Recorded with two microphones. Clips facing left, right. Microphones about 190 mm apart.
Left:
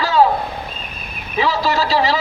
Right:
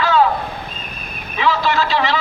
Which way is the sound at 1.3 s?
35° left (ahead or behind).